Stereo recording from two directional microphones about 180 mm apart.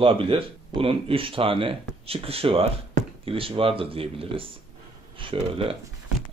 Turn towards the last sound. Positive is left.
turn(degrees=-30)  # may be behind; listen again after turning